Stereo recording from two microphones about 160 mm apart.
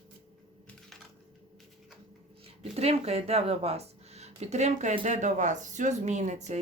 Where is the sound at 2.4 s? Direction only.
40° right (ahead or behind).